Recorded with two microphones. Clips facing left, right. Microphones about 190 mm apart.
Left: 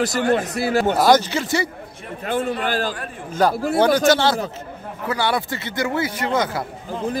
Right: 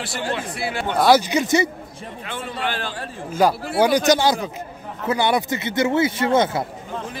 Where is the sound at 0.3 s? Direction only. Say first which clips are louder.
Left 5 dB; 40° left (ahead or behind).